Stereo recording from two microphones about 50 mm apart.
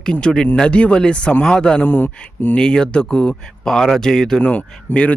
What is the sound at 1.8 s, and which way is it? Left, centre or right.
Speech, left.